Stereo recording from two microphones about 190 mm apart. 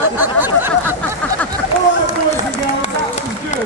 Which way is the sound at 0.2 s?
10° right (ahead or behind).